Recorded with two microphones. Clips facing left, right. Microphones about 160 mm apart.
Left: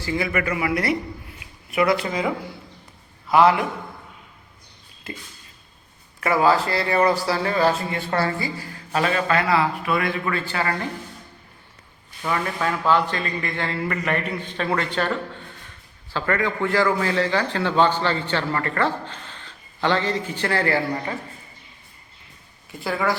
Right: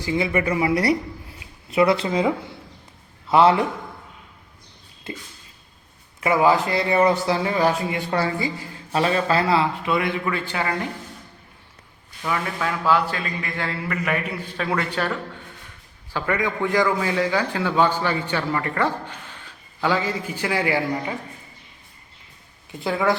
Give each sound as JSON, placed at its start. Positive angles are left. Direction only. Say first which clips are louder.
{"t": 0.0, "sound": "a man's voice", "louder": "right 2 dB", "side_deg": -20}
{"t": 6.1, "sound": "speech", "louder": "right 1 dB", "side_deg": -20}
{"t": 12.2, "sound": "a man's voice", "louder": "left 1 dB", "side_deg": 0}